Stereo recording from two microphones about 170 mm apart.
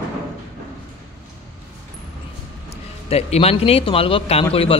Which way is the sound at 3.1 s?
35° left (ahead or behind).